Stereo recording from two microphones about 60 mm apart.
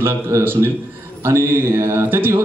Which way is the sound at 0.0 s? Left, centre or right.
Right.